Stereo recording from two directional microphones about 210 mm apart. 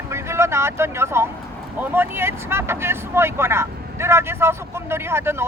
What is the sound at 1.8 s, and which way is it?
Speech, 10° right (ahead or behind).